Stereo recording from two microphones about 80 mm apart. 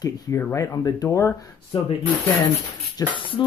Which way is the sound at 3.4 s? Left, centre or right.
Left.